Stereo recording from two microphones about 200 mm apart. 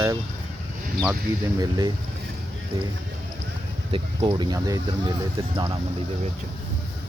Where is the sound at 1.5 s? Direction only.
20° right (ahead or behind).